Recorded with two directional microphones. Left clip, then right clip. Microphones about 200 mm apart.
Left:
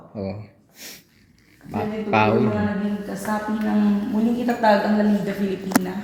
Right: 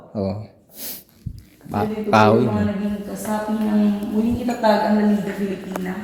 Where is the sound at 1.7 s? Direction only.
25° right (ahead or behind).